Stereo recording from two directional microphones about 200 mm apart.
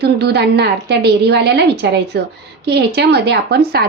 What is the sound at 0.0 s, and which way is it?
A woman's voice, 55° right (ahead or behind).